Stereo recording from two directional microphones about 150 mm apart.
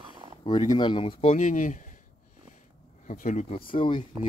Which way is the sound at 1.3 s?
60° left (ahead or behind).